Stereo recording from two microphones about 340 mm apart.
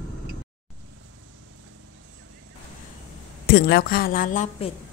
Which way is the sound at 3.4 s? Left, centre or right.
Left.